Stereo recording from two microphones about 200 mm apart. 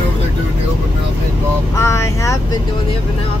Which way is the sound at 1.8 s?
15° left (ahead or behind).